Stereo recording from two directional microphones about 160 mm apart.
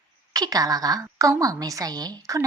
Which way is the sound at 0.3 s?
25° right (ahead or behind).